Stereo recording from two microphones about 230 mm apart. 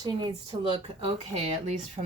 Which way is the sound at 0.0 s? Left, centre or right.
Centre.